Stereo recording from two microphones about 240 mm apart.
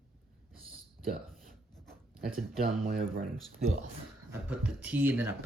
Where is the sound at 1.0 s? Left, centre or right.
Right.